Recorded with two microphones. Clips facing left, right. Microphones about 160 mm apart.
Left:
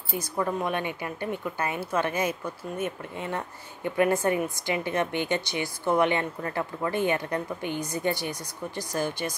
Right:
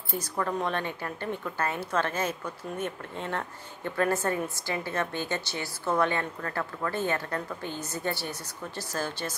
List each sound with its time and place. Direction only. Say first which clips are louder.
0.1 s speech: left 2 dB; 10° left (ahead or behind)